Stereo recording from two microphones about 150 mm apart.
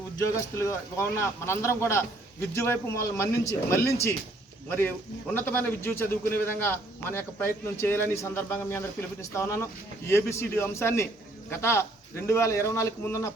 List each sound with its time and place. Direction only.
0.2 s a man's voice: 20° left (ahead or behind)